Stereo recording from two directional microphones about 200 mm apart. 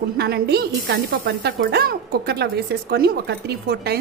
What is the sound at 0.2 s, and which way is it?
Speech, 55° right (ahead or behind).